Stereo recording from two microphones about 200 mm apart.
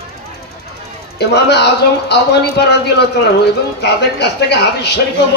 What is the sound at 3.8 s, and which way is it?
A woman's voice, 55° left (ahead or behind).